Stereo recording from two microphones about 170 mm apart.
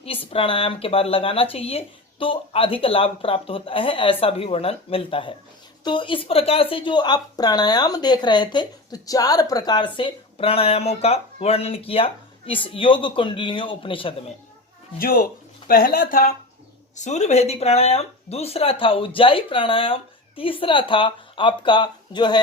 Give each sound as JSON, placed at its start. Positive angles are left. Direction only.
{"t": 0.0, "sound": "a woman's voice", "side_deg": 35}
{"t": 14.9, "sound": "speech", "side_deg": 60}
{"t": 16.9, "sound": "speech", "side_deg": 45}